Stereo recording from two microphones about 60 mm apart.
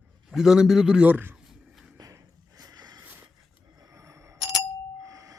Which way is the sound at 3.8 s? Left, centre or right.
Right.